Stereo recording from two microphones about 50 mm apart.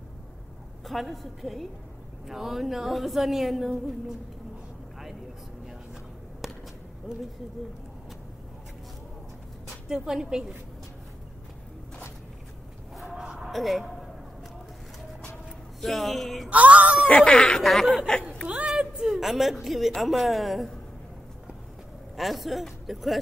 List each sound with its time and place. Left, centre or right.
0.8 s a woman's voice: centre
6.4 s a sound: centre
9.8 s a woman's voice: centre
12.9 s fowl: centre
13.2 s a sound: centre
13.5 s speech: centre
15.8 s a woman's voice: centre
16.4 s speech: right
17.1 s speech: left
17.6 s a woman's voice: centre
18.7 s a woman's voice: centre
22.1 s speech: centre